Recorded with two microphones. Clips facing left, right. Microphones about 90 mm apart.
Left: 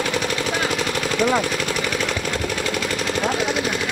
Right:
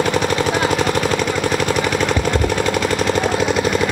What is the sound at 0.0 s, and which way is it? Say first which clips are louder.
Machine gun: right 6 dB; 45° right (ahead or behind).